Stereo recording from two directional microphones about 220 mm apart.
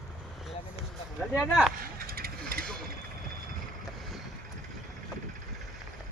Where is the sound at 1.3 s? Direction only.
5° right (ahead or behind).